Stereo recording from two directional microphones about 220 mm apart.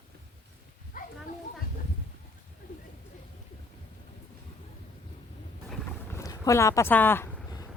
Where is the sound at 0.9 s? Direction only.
40° left (ahead or behind).